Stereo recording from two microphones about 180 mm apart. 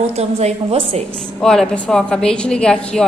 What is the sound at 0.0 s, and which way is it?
A woman's voice, 35° right (ahead or behind).